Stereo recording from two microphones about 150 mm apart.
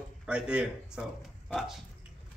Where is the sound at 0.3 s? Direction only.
5° right (ahead or behind).